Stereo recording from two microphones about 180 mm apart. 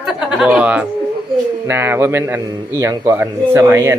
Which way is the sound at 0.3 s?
5° right (ahead or behind).